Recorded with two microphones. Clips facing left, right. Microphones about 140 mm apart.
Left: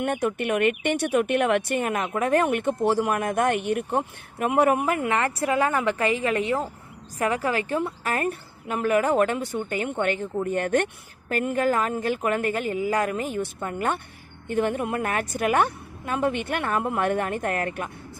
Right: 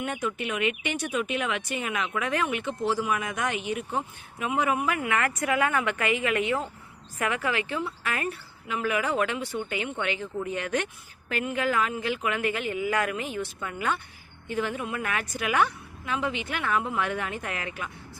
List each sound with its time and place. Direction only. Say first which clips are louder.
0.0 s a woman's voice: left 6 dB; 55° left (ahead or behind)
5.1 s a woman's voice: left 3 dB; 30° left (ahead or behind); by 17.9 s 50° left (ahead or behind)